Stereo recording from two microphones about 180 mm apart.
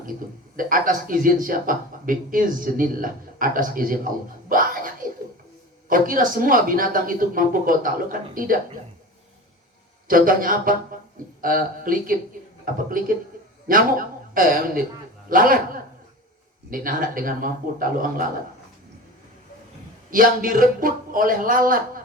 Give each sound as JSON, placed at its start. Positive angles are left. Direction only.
{"t": 0.5, "sound": "a man's voice", "side_deg": -50}
{"t": 5.9, "sound": "a man's voice", "side_deg": -50}
{"t": 10.1, "sound": "a man's voice", "side_deg": -50}
{"t": 13.7, "sound": "a sound", "side_deg": -50}
{"t": 15.3, "sound": "a man's voice", "side_deg": -50}
{"t": 20.1, "sound": "a man's voice", "side_deg": -50}